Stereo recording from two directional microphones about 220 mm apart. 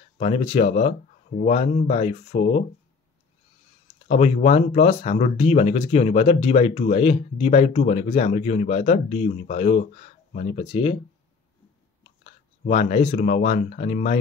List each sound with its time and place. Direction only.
0.2 s speech: 30° left (ahead or behind)
4.1 s speech: 30° left (ahead or behind)
12.2 s speech: 30° left (ahead or behind)